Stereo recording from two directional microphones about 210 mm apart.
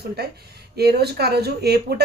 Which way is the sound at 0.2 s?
50° right (ahead or behind).